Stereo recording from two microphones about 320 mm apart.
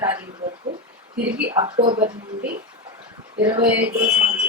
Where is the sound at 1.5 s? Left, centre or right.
Centre.